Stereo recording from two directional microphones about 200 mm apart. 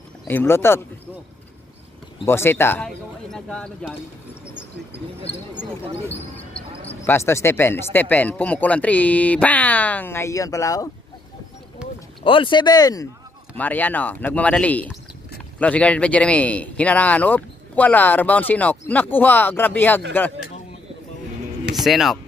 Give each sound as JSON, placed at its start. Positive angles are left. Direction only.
{"t": 0.3, "sound": "speech", "side_deg": 10}
{"t": 2.2, "sound": "speech", "side_deg": 10}
{"t": 6.3, "sound": "basketball bounce", "side_deg": 10}
{"t": 7.0, "sound": "speech", "side_deg": 15}
{"t": 11.8, "sound": "a sound", "side_deg": -5}
{"t": 12.2, "sound": "speech", "side_deg": 25}
{"t": 21.7, "sound": "speech", "side_deg": 0}